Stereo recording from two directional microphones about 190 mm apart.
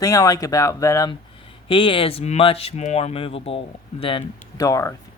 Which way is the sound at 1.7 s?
25° left (ahead or behind).